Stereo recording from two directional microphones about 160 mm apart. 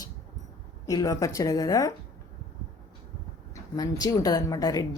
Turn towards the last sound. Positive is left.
turn(degrees=20)  # may be behind; listen again after turning